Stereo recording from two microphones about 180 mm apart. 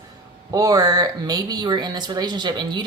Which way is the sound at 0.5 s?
20° right (ahead or behind).